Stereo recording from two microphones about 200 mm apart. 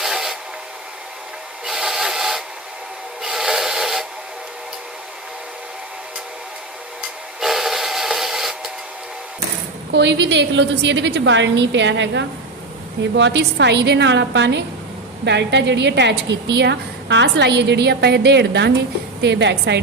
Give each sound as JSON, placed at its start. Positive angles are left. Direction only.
{"t": 0.0, "sound": "train", "side_deg": 0}
{"t": 1.6, "sound": "rub", "side_deg": 0}
{"t": 7.3, "sound": "steam whistle", "side_deg": 0}
{"t": 9.9, "sound": "a woman's voice", "side_deg": -60}